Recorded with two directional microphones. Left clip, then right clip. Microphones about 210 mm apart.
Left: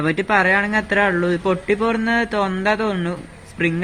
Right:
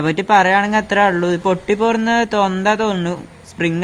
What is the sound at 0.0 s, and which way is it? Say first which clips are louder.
Speech: right 4 dB; 40° right (ahead or behind).